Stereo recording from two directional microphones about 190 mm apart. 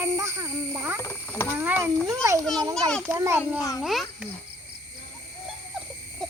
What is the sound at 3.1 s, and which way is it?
Speech, 15° right (ahead or behind).